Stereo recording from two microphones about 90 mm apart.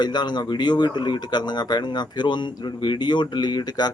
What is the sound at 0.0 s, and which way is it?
Speech, 55° left (ahead or behind).